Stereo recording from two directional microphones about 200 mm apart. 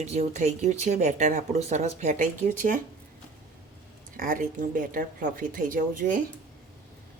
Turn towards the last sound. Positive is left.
turn(degrees=-40)  # may be behind; listen again after turning